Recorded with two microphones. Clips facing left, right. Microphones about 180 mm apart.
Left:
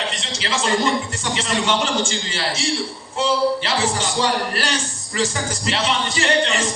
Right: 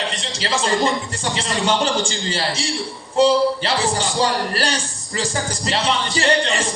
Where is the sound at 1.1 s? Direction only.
35° right (ahead or behind).